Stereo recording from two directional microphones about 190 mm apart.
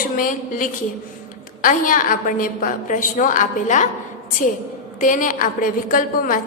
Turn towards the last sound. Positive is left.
turn(degrees=45)  # may be behind; listen again after turning